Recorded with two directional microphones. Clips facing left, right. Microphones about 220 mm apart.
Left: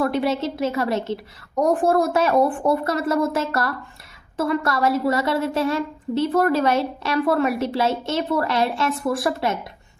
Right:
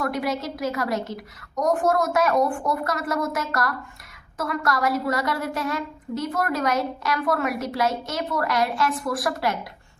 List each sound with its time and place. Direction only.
0.0 s a woman's voice: 30° left (ahead or behind)